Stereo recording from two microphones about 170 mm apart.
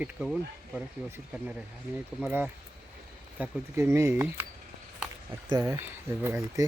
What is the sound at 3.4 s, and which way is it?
Speech, 15° right (ahead or behind).